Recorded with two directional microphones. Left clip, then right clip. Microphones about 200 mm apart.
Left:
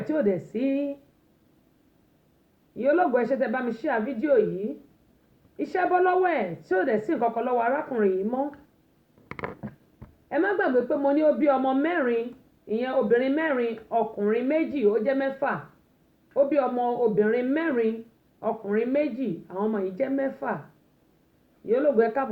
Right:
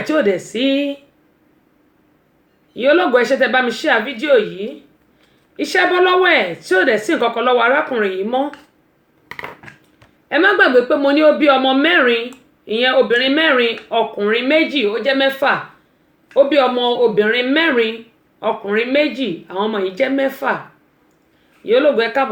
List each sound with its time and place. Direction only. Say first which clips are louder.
0.0 s speech: right 9 dB; 35° right (ahead or behind)
2.7 s speech: right 9 dB; 30° right (ahead or behind)
5.5 s speech: right 9 dB; 35° right (ahead or behind)
10.2 s speech: right 12 dB; 30° right (ahead or behind)
21.7 s speech: right 8 dB; 30° right (ahead or behind)